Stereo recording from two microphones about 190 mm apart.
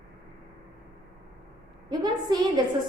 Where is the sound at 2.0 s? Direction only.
20° right (ahead or behind).